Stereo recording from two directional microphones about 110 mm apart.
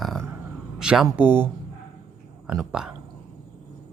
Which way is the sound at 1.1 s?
20° right (ahead or behind).